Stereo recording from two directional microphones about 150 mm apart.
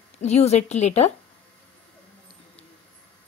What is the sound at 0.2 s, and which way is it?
Speech, 45° left (ahead or behind).